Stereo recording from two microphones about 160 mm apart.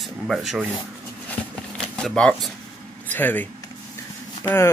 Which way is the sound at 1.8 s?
5° left (ahead or behind).